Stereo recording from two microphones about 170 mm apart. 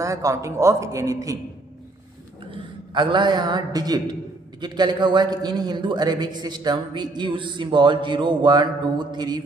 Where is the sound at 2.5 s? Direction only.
30° right (ahead or behind).